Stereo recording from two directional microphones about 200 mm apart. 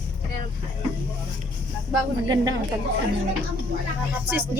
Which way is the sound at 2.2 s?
20° right (ahead or behind).